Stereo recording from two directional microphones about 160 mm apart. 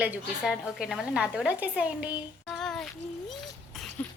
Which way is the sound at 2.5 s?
Centre (ahead or behind).